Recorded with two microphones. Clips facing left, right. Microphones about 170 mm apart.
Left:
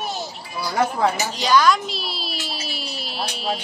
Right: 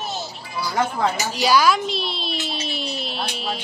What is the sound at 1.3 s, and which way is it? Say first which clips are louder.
Speech: right 1 dB; 10° right (ahead or behind).